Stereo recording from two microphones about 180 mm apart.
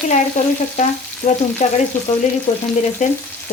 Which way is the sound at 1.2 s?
40° left (ahead or behind).